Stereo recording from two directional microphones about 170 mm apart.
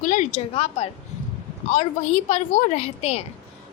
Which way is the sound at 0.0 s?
50° left (ahead or behind).